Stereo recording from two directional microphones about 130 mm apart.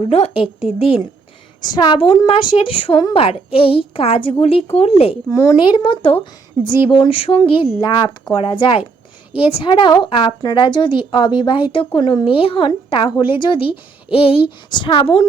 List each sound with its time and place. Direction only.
0.0 s a woman's voice: 50° left (ahead or behind)
5.3 s speech: 25° left (ahead or behind)
5.5 s a woman's voice: 40° left (ahead or behind)